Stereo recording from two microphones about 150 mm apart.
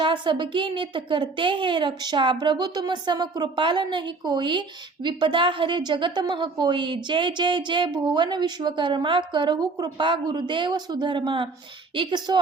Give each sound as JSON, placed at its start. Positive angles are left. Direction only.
{"t": 0.0, "sound": "a woman's voice", "side_deg": -30}